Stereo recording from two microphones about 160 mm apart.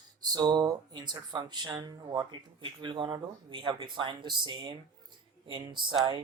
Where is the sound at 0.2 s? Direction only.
25° right (ahead or behind).